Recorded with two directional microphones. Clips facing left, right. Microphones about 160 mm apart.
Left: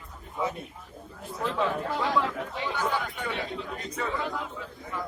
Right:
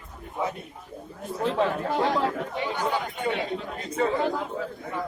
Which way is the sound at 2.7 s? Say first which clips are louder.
Even; 20° right (ahead or behind).